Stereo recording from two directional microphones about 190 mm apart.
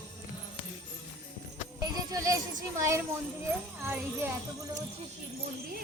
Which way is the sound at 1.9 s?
20° right (ahead or behind).